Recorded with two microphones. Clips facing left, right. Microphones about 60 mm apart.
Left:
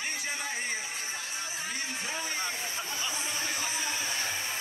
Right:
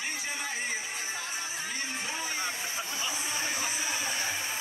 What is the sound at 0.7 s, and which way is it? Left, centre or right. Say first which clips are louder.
Music: even; right.